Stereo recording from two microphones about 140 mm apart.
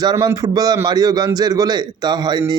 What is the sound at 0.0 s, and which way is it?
A man's voice, 30° right (ahead or behind).